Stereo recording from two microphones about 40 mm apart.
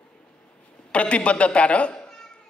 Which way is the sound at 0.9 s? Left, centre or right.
Left.